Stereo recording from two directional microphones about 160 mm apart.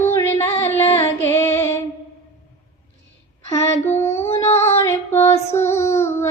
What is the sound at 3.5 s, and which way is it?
Child singing, 15° left (ahead or behind).